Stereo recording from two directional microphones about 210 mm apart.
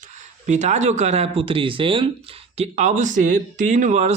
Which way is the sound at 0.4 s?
35° right (ahead or behind).